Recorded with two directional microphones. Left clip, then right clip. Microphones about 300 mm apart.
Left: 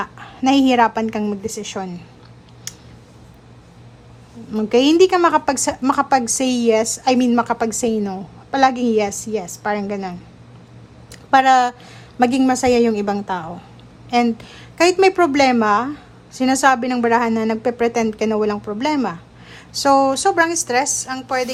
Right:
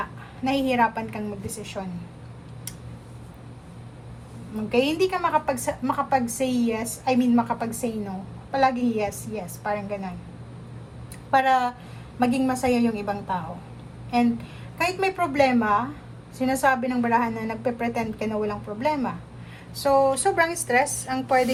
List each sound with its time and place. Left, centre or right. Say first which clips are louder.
0.4 s a woman's voice: left 8 dB; centre
4.5 s a woman's voice: left 9 dB; left
11.3 s a woman's voice: left 7 dB; left
14.8 s a woman's voice: left 10 dB; left; by 21.5 s centre